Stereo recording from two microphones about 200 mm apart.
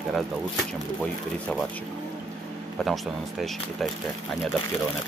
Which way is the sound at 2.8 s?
Centre (ahead or behind).